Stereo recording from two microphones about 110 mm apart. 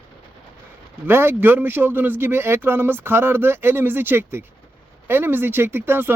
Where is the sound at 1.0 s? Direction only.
20° right (ahead or behind).